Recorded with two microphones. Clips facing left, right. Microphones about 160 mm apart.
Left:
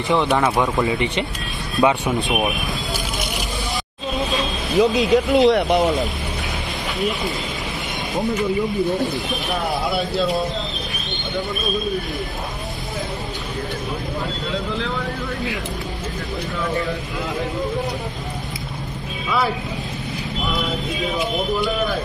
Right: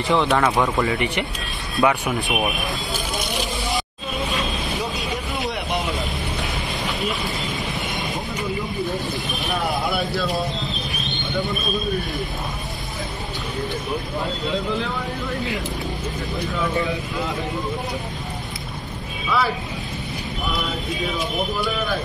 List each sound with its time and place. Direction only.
0.1 s speech: 15° left (ahead or behind)
4.7 s speech: 90° left
5.5 s speech: 55° left (ahead or behind)
9.8 s speech: 25° left (ahead or behind)